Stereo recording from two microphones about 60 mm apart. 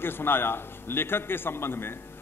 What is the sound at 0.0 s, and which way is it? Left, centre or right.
A man's voice, left.